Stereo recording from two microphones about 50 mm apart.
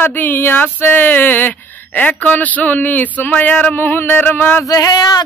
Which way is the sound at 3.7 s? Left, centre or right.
Left.